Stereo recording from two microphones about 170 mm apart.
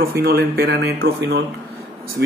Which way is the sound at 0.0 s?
65° right (ahead or behind).